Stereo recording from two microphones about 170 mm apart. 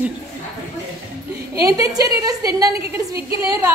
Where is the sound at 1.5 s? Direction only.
20° right (ahead or behind).